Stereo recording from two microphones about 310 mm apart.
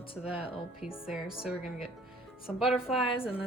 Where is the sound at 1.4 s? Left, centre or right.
Centre.